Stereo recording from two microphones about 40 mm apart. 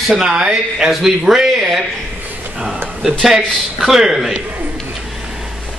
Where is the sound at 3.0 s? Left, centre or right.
Centre.